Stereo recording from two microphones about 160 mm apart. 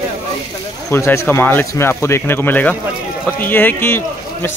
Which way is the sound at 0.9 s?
15° left (ahead or behind).